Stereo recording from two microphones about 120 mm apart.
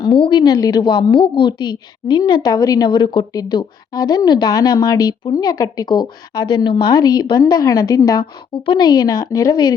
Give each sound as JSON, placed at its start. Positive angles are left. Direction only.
{"t": 0.0, "sound": "a woman's voice", "side_deg": 45}
{"t": 0.4, "sound": "a woman's voice", "side_deg": 30}
{"t": 8.6, "sound": "a woman's voice", "side_deg": 40}